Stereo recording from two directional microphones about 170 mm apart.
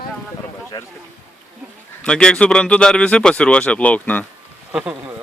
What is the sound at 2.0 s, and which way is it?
Speech, 5° left (ahead or behind).